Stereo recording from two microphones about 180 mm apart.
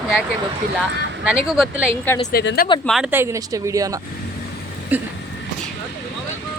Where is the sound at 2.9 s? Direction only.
5° right (ahead or behind).